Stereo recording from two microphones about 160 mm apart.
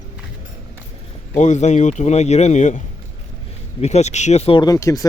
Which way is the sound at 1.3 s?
45° left (ahead or behind).